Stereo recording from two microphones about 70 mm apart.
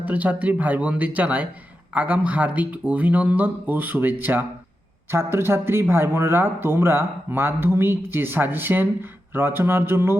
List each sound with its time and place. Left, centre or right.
0.0 s speech: right